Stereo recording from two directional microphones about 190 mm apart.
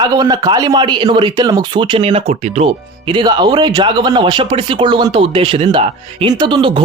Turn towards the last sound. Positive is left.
turn(degrees=-25)  # may be behind; listen again after turning